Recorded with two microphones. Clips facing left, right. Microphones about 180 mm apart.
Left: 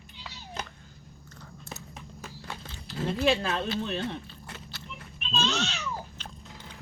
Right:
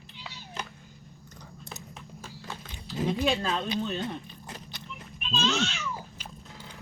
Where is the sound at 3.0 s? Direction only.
5° left (ahead or behind).